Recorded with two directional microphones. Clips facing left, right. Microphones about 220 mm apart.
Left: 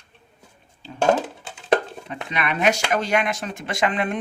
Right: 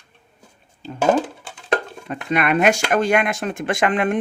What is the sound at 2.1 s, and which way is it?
Speech, 50° right (ahead or behind).